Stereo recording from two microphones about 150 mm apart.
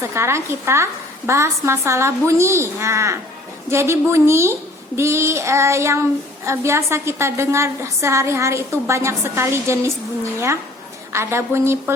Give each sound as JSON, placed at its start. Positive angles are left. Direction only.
{"t": 0.0, "sound": "a woman's voice", "side_deg": -15}
{"t": 11.1, "sound": "a woman's voice", "side_deg": -15}